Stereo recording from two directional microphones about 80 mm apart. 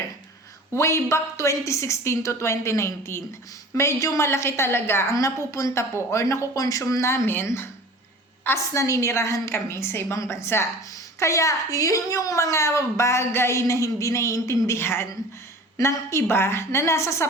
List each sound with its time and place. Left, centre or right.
0.7 s a woman's voice: left